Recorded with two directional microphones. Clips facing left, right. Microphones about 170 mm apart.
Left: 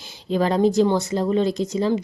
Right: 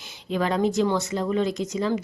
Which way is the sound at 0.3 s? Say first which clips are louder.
Left 4 dB; 35° left (ahead or behind).